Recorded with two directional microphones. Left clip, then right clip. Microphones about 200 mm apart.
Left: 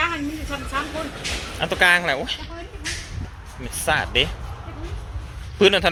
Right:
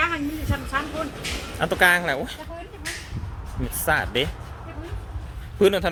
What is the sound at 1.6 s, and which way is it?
Speech, 15° right (ahead or behind).